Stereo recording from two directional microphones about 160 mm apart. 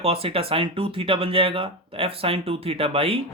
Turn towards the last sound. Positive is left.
turn(degrees=-35)  # may be behind; listen again after turning